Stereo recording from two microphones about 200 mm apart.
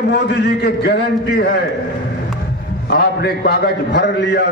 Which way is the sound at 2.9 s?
55° left (ahead or behind).